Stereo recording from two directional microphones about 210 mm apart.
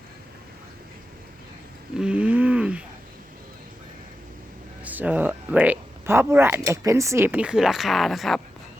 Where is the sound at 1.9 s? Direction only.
5° right (ahead or behind).